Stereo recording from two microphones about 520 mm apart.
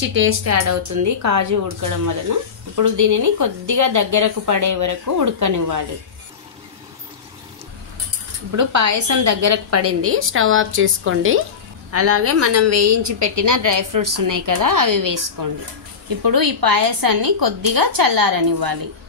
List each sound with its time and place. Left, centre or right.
0.1 s speech: right
8.5 s a woman's voice: right